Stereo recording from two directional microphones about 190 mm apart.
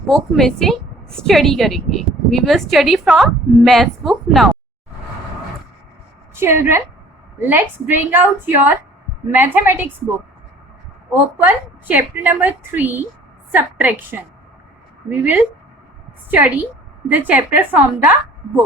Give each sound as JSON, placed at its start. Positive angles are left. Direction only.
{"t": 0.1, "sound": "a woman's voice", "side_deg": 0}
{"t": 6.3, "sound": "a woman's voice", "side_deg": -15}
{"t": 17.1, "sound": "a woman's voice", "side_deg": -10}